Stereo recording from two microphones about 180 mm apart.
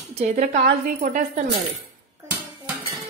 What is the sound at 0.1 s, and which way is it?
A woman's voice, 35° right (ahead or behind).